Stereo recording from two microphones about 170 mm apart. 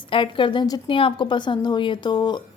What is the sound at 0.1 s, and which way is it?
A woman's voice, 30° left (ahead or behind).